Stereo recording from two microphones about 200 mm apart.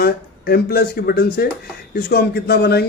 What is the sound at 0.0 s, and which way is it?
Speech, 50° left (ahead or behind).